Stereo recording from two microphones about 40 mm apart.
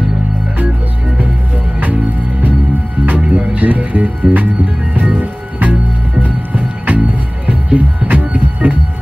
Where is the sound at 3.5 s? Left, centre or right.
Right.